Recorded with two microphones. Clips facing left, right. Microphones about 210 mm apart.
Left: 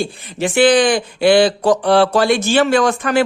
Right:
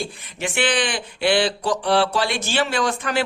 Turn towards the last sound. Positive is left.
turn(degrees=50)  # may be behind; listen again after turning